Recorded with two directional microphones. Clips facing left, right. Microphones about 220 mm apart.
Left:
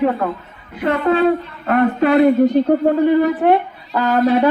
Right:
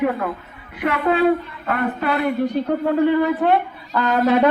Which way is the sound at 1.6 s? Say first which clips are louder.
Left 7 dB; 40° left (ahead or behind).